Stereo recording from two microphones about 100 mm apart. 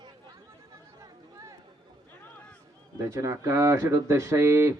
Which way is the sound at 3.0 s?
30° right (ahead or behind).